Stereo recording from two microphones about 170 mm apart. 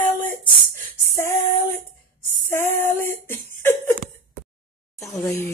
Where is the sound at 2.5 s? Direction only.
15° left (ahead or behind).